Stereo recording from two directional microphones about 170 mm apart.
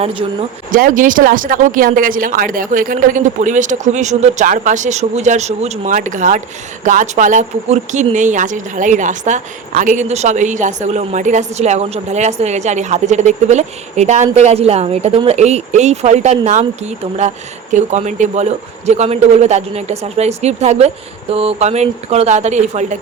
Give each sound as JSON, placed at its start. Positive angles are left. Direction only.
{"t": 0.0, "sound": "speech", "side_deg": -30}
{"t": 0.7, "sound": "speech", "side_deg": -50}